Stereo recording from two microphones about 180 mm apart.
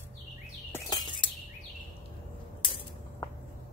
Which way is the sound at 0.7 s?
25° left (ahead or behind).